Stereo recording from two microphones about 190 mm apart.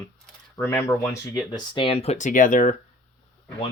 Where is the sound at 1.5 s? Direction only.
25° left (ahead or behind); by 2.7 s 45° left (ahead or behind).